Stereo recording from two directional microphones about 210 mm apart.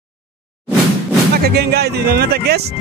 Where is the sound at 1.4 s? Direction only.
50° right (ahead or behind).